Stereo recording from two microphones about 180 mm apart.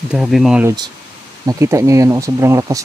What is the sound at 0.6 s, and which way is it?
Speech, 25° right (ahead or behind).